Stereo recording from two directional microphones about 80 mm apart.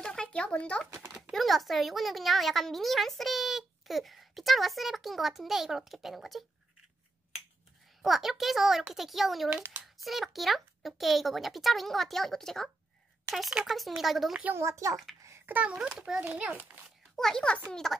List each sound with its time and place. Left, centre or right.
0.0 s a sound: centre
0.8 s a child's voice: right
1.3 s speech: centre
8.0 s speech: centre
9.5 s a child's voice: right
10.0 s speech: centre
14.6 s a child's voice: right
15.2 s a sound: right
15.5 s a child's voice: centre
17.1 s a child's voice: centre